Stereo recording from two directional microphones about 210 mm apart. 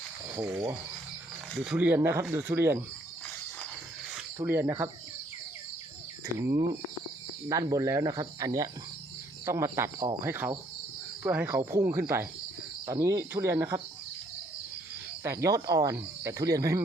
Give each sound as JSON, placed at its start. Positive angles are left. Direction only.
{"t": 0.3, "sound": "speech", "side_deg": -10}
{"t": 1.6, "sound": "speech", "side_deg": -5}
{"t": 4.4, "sound": "speech", "side_deg": -10}
{"t": 7.4, "sound": "speech", "side_deg": -15}
{"t": 15.2, "sound": "speech", "side_deg": -15}